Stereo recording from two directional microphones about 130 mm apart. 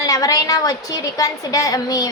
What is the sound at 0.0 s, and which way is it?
A woman's voice, 25° left (ahead or behind).